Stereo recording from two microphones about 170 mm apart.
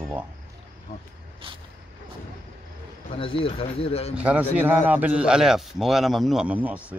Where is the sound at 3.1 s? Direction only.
30° left (ahead or behind).